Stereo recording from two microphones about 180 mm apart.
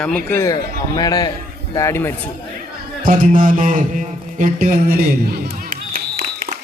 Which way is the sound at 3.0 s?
50° right (ahead or behind).